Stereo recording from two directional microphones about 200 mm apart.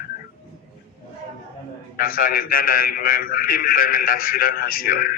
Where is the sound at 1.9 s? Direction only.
45° left (ahead or behind).